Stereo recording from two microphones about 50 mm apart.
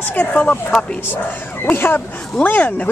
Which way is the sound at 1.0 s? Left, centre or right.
Left.